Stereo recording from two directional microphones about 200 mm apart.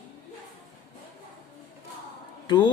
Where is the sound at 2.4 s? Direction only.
20° left (ahead or behind).